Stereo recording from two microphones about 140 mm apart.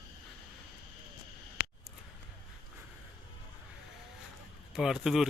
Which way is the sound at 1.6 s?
55° left (ahead or behind).